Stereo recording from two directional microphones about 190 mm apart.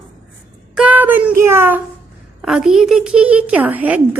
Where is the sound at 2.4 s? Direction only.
5° right (ahead or behind).